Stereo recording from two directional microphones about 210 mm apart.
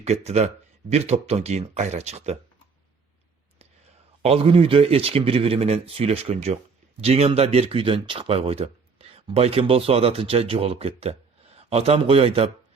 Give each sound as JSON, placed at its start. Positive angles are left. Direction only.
{"t": 0.0, "sound": "speech", "side_deg": -30}
{"t": 4.2, "sound": "speech", "side_deg": -30}